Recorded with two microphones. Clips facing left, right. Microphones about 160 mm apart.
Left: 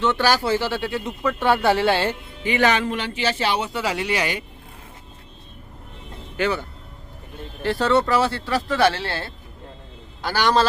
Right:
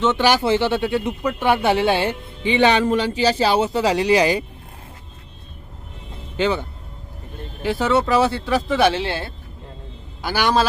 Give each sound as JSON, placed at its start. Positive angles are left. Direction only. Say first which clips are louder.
{"t": 0.0, "sound": "speech", "louder": "right 3 dB", "side_deg": -20}
{"t": 6.3, "sound": "speech", "louder": "right 3 dB", "side_deg": -20}